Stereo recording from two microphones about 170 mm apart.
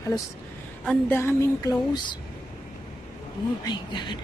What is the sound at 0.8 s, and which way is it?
A woman's voice, 15° left (ahead or behind).